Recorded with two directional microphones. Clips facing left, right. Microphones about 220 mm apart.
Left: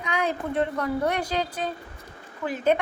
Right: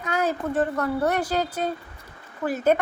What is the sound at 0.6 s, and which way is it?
A woman's voice, 45° right (ahead or behind).